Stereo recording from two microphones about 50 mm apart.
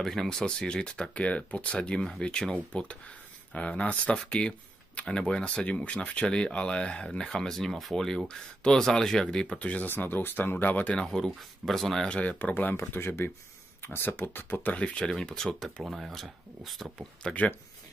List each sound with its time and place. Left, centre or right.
0.0 s speech: centre
9.6 s speech: left
9.8 s speech: left
11.0 s speech: centre
12.1 s speech: left
12.9 s speech: left
15.0 s speech: centre
15.8 s speech: centre
17.2 s speech: left